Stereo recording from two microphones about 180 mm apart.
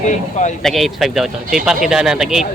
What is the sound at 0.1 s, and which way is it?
Speech, 40° left (ahead or behind).